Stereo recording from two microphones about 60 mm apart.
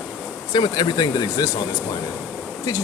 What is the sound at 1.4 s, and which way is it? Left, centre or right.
Speech, left.